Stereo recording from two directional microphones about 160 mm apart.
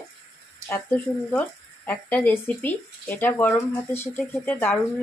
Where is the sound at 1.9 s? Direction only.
10° left (ahead or behind).